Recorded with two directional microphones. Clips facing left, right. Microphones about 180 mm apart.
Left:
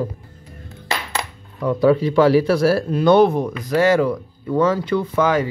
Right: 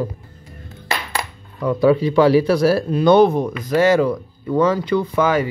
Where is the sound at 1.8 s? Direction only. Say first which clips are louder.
Right 1 dB; 15° right (ahead or behind).